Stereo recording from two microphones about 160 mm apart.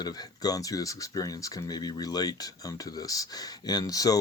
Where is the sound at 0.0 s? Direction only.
25° left (ahead or behind).